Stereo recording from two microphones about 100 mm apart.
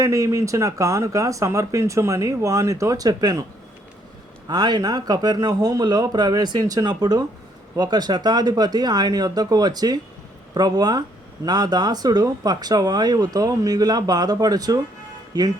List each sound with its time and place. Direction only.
0.0 s speech: 35° right (ahead or behind)
4.4 s speech: 45° right (ahead or behind)